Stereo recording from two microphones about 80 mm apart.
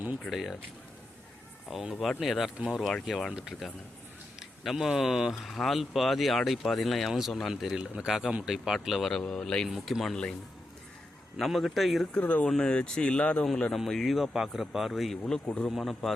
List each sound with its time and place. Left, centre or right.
0.3 s speech: centre
1.7 s speech: centre
4.4 s speech: centre
9.6 s speech: centre
11.3 s speech: centre
12.1 s speech: centre
13.7 s speech: centre
15.2 s speech: centre